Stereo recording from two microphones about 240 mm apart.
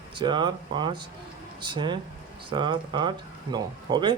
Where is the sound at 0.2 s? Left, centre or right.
Centre.